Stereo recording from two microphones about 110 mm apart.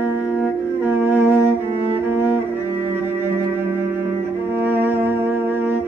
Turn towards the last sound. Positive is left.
turn(degrees=-15)  # may be behind; listen again after turning